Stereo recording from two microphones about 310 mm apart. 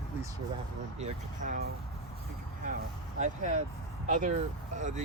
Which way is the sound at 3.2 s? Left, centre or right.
Right.